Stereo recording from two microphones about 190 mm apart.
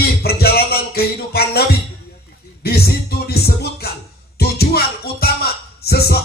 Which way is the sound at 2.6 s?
55° left (ahead or behind).